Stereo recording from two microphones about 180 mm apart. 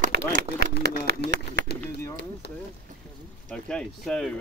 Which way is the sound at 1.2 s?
65° left (ahead or behind).